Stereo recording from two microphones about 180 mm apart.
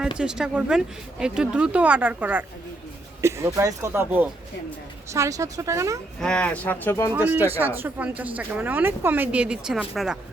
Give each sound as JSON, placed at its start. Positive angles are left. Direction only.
{"t": 0.2, "sound": "speech", "side_deg": -5}
{"t": 6.1, "sound": "speech", "side_deg": 5}
{"t": 7.1, "sound": "speech", "side_deg": -10}